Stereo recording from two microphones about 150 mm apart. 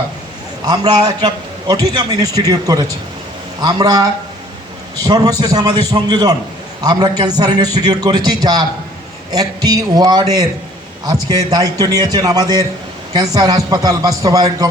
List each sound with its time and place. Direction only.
0.6 s a man's voice: 25° right (ahead or behind)